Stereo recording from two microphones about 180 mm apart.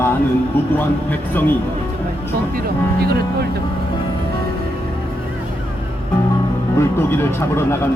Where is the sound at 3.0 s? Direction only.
60° right (ahead or behind).